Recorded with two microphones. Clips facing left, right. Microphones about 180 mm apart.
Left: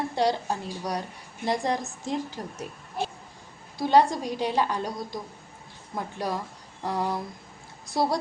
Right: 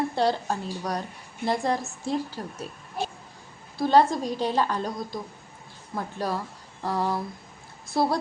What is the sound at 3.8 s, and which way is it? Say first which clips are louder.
A woman's voice: right 1 dB; 15° left (ahead or behind).